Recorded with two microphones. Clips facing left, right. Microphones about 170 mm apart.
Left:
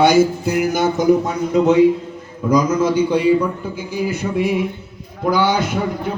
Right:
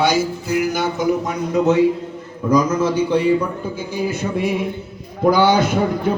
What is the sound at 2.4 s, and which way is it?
A man's voice, 10° left (ahead or behind).